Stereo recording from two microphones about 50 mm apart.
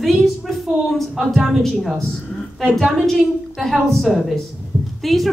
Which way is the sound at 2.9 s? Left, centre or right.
Centre.